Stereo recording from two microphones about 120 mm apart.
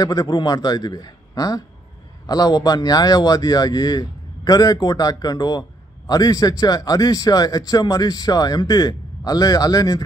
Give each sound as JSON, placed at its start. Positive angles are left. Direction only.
{"t": 0.0, "sound": "a man's voice", "side_deg": 30}